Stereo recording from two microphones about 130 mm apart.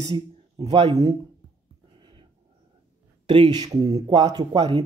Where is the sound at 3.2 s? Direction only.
40° right (ahead or behind).